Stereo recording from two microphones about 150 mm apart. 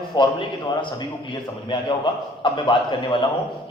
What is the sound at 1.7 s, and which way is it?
Speech, 30° left (ahead or behind).